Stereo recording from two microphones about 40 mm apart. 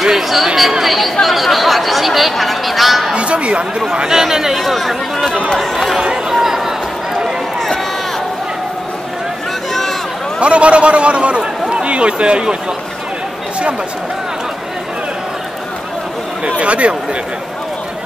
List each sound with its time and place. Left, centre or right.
0.0 s chatter: centre
0.6 s speech: centre
3.2 s a man's voice: right
4.2 s speech: centre
4.6 s speech: centre
5.9 s speech: centre
6.4 s chatter: centre
10.4 s a man's voice: right
16.4 s speech: right